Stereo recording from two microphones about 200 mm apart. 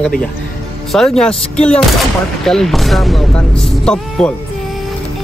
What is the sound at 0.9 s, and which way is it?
Speech, centre (ahead or behind).